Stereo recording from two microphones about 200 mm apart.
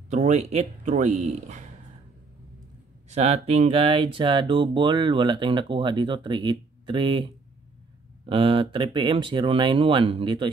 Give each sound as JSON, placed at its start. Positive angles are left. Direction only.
{"t": 0.1, "sound": "speech", "side_deg": -35}
{"t": 3.1, "sound": "speech", "side_deg": -35}
{"t": 8.3, "sound": "speech", "side_deg": -25}